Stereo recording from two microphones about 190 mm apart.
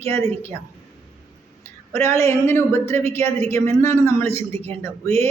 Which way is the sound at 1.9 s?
15° left (ahead or behind).